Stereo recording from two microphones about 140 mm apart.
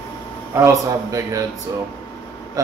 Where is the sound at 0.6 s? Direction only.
25° right (ahead or behind).